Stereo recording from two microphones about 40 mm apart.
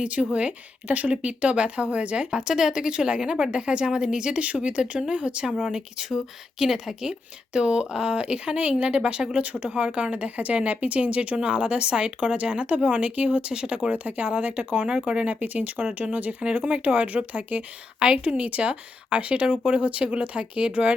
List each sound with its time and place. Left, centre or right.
0.0 s speech: right
13.9 s speech: right
15.4 s speech: right
18.0 s speech: right